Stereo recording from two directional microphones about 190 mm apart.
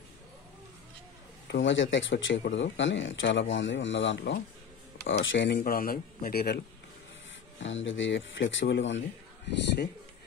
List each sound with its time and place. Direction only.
1.5 s speech: 75° left (ahead or behind)
5.0 s speech: 80° left
5.6 s a man's voice: 50° left (ahead or behind)
7.6 s speech: 80° left